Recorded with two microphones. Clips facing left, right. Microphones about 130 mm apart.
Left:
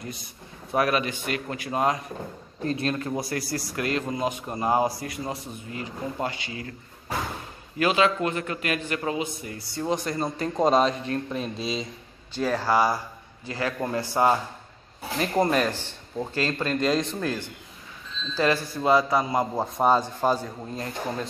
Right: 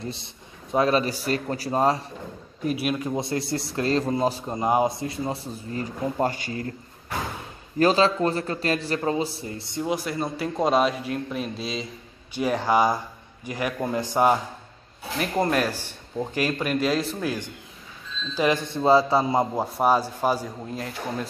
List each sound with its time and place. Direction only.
0.0 s a man's voice: 25° right (ahead or behind)
2.6 s a man's voice: 10° right (ahead or behind)
3.2 s a man's voice: 25° right (ahead or behind)
4.6 s a man's voice: 20° right (ahead or behind); by 6.7 s 45° right (ahead or behind)
7.8 s a man's voice: 35° right (ahead or behind)
9.8 s a man's voice: 5° right (ahead or behind)
12.4 s a man's voice: 15° right (ahead or behind)
15.1 s a man's voice: centre (ahead or behind); by 19.4 s 25° right (ahead or behind)
19.5 s a man's voice: 10° right (ahead or behind)